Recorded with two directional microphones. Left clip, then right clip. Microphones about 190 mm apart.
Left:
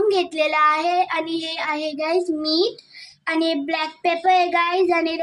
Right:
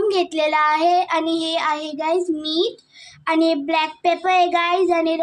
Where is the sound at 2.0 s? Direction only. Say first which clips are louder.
Right 1 dB; 20° right (ahead or behind).